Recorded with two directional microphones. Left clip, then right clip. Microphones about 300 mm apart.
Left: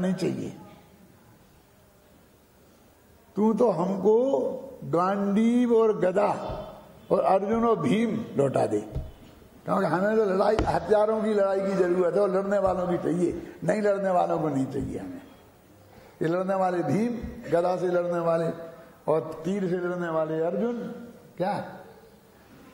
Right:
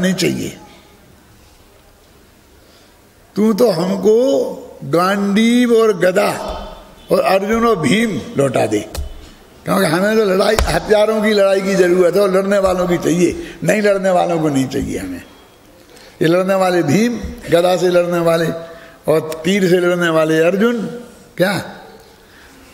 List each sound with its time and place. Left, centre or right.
0.0 s a man's voice: centre
3.3 s a man's voice: centre; by 15.0 s right
16.2 s a man's voice: right